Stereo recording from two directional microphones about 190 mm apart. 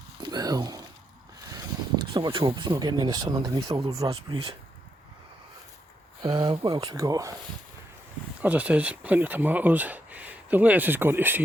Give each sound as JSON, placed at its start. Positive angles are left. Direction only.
{"t": 0.2, "sound": "a sound", "side_deg": -20}
{"t": 1.5, "sound": "speech", "side_deg": -20}
{"t": 6.2, "sound": "speech", "side_deg": -25}
{"t": 8.4, "sound": "speech", "side_deg": -10}